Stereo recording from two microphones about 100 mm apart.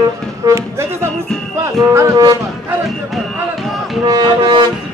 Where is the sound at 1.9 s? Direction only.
35° right (ahead or behind).